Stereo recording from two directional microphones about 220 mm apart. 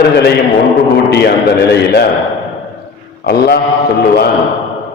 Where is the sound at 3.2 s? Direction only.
45° left (ahead or behind).